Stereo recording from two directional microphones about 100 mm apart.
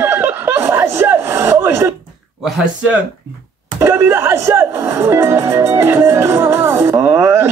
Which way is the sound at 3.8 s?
25° right (ahead or behind).